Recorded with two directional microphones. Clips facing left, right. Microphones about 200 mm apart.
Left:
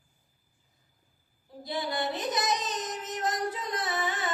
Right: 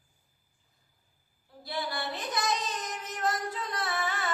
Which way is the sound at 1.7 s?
20° left (ahead or behind).